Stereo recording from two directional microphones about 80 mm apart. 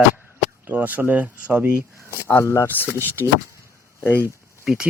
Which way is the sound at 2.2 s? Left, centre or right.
Left.